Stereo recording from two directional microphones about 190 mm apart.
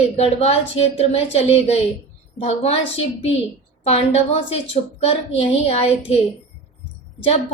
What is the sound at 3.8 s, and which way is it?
A woman's voice, 35° left (ahead or behind).